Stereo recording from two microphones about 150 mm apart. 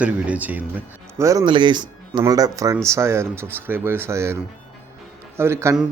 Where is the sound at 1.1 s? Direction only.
20° right (ahead or behind).